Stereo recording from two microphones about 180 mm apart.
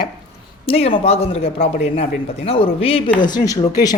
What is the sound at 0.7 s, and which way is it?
Speech, 35° left (ahead or behind).